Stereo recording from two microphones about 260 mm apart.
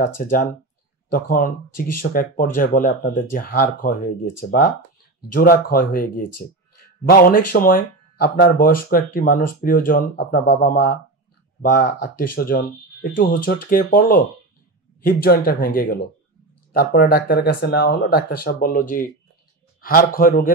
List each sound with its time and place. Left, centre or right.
0.2 s speech: left